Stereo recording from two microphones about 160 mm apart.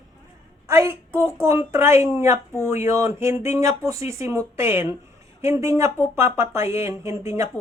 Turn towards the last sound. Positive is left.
turn(degrees=-20)  # may be behind; listen again after turning